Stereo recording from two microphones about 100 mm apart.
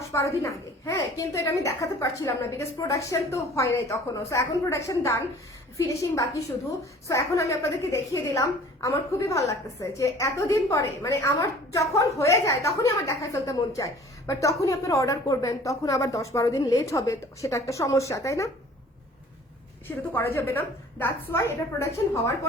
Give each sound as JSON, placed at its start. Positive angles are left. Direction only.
{"t": 0.0, "sound": "a woman's voice", "side_deg": 30}
{"t": 20.1, "sound": "a woman's voice", "side_deg": 20}